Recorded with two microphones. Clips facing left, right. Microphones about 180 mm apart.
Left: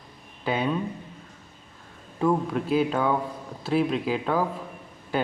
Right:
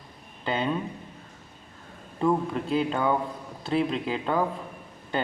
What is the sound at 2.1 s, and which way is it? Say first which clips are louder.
Speech: left 1 dB; centre (ahead or behind).